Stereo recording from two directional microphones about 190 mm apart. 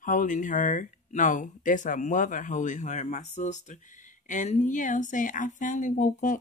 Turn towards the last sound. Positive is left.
turn(degrees=45)  # may be behind; listen again after turning